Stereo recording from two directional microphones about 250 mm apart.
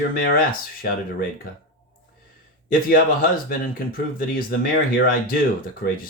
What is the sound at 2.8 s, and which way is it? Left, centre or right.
Speech, left.